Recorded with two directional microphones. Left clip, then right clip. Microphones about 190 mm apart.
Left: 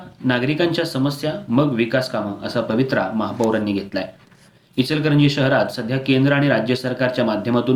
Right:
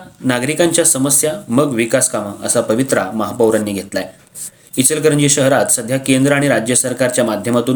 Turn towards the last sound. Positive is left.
turn(degrees=-45)  # may be behind; listen again after turning